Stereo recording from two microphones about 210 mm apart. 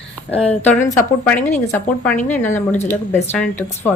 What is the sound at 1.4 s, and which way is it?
Speech, 35° left (ahead or behind).